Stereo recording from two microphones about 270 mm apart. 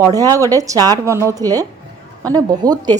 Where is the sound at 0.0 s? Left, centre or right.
Centre.